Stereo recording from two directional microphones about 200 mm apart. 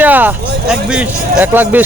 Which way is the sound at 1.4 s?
10° right (ahead or behind).